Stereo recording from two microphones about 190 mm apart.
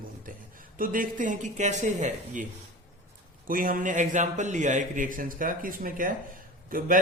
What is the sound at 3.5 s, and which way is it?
A man's voice, 45° right (ahead or behind).